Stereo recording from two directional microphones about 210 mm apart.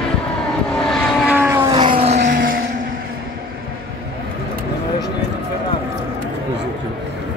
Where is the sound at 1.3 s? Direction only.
10° right (ahead or behind); by 2.2 s 30° right (ahead or behind).